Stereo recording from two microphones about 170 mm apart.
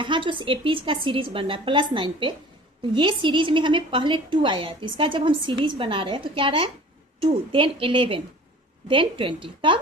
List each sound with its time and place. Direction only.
0.0 s a woman's voice: 30° right (ahead or behind)